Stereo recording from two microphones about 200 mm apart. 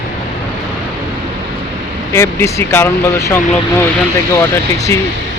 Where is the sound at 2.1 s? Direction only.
15° left (ahead or behind).